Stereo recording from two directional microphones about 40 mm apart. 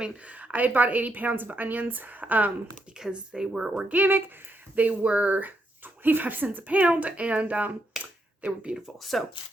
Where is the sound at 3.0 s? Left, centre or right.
Centre.